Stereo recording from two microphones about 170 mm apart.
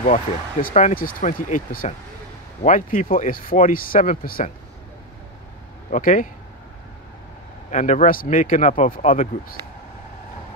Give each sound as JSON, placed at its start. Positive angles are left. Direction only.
{"t": 0.0, "sound": "speech", "side_deg": 45}
{"t": 5.9, "sound": "speech", "side_deg": 50}
{"t": 7.7, "sound": "speech", "side_deg": 45}